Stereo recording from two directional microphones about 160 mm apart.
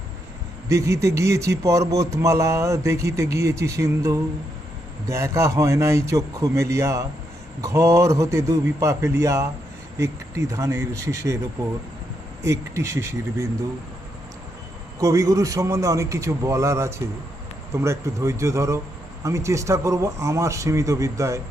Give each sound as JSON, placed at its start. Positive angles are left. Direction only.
{"t": 0.7, "sound": "speech", "side_deg": -20}
{"t": 12.4, "sound": "speech", "side_deg": -20}
{"t": 15.0, "sound": "speech", "side_deg": -20}